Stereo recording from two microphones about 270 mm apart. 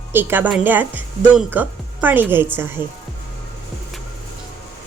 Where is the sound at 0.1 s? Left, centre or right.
Centre.